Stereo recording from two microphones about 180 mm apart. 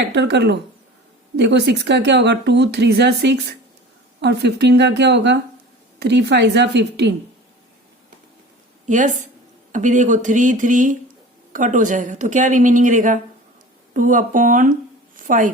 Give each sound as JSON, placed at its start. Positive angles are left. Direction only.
{"t": 0.1, "sound": "speech", "side_deg": -70}
{"t": 8.9, "sound": "a woman's voice", "side_deg": -45}